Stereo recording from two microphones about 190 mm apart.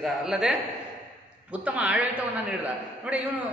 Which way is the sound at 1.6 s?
5° right (ahead or behind).